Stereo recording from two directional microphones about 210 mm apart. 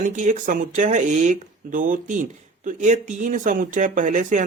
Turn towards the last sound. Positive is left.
turn(degrees=-35)  # may be behind; listen again after turning